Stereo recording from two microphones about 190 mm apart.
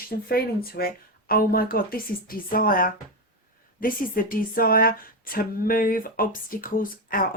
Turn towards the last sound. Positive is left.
turn(degrees=50)  # may be behind; listen again after turning